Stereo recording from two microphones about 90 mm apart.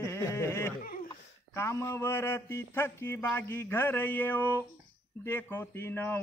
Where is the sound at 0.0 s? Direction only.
30° left (ahead or behind).